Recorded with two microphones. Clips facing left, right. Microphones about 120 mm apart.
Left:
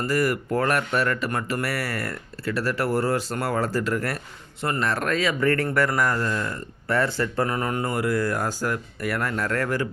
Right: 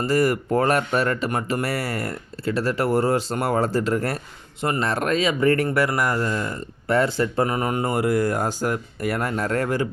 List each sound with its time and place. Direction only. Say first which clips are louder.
0.0 s speech: right 3 dB; 25° right (ahead or behind)
5.6 s speech: right 1 dB; 5° right (ahead or behind)